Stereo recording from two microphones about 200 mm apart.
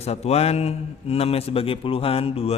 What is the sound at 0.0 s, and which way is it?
A man's voice, 30° left (ahead or behind).